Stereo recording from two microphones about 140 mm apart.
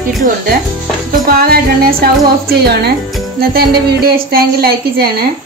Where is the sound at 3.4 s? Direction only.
90° right.